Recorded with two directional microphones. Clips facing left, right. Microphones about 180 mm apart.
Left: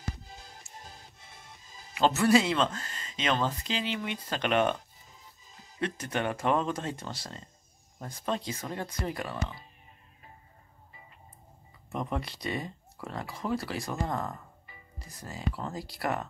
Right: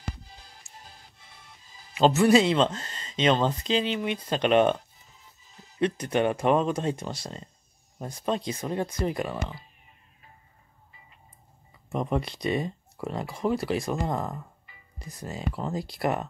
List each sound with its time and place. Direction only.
0.3 s music: 45° left (ahead or behind)
2.0 s speech: 20° right (ahead or behind)
11.9 s speech: 20° right (ahead or behind)